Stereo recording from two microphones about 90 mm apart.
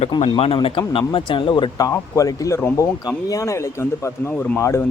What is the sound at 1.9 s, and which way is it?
Speech, 35° left (ahead or behind).